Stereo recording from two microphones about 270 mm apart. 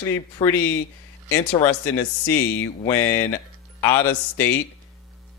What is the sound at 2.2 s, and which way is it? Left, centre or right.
Speech, centre.